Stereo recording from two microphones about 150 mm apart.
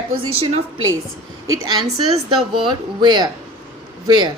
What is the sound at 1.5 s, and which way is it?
A woman's voice, 30° right (ahead or behind).